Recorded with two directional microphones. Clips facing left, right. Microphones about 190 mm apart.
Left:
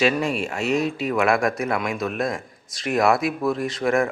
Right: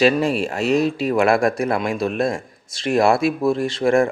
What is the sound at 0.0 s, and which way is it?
Speech, 35° right (ahead or behind).